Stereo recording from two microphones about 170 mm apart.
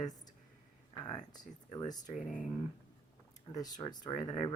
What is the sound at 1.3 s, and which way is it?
Speech, 25° left (ahead or behind).